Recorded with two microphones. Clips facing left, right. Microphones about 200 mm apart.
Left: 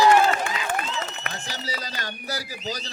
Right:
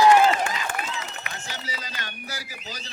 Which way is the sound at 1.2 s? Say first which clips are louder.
Left 3 dB; 40° left (ahead or behind).